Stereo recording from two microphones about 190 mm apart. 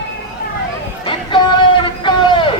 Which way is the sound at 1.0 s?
25° left (ahead or behind).